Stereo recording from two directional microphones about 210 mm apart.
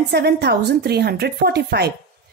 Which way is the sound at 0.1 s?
50° right (ahead or behind).